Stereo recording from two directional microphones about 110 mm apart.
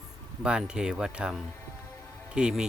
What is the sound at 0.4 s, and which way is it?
Speech, 5° right (ahead or behind).